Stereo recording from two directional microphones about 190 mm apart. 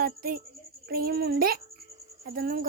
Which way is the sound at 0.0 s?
50° right (ahead or behind).